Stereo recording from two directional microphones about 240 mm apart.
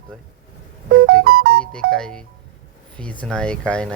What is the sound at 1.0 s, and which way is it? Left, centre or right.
Music, right.